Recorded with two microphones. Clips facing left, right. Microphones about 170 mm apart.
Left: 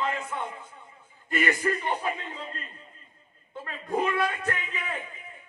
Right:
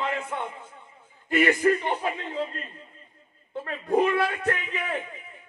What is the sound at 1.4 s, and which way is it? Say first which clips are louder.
Speech: right 6 dB; 30° right (ahead or behind).